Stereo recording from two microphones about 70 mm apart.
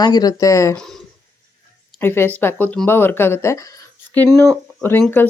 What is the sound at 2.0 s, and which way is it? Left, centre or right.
A woman's voice, left.